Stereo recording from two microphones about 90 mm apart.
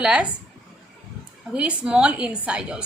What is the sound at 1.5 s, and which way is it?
A woman's voice, 15° right (ahead or behind).